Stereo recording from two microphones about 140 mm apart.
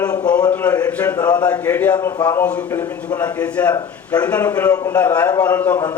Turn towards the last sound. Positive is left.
turn(degrees=15)  # may be behind; listen again after turning